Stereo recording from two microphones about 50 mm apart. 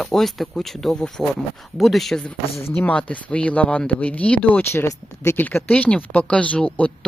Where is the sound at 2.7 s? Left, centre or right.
Left.